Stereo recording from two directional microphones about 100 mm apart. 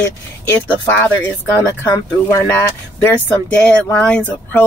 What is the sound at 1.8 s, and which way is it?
Speech, 30° left (ahead or behind).